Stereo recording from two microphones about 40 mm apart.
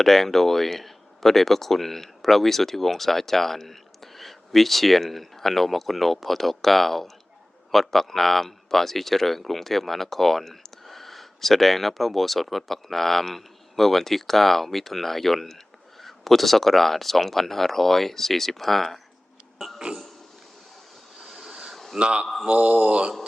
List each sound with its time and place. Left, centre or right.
0.0 s speech: centre
19.5 s burping: centre
21.2 s vehicle: centre
21.9 s speech: right
22.4 s mantra: right